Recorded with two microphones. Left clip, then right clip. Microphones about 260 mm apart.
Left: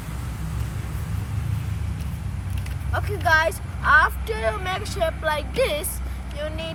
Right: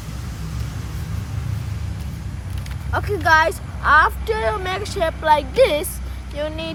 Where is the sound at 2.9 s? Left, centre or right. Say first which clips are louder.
Right 4 dB; right.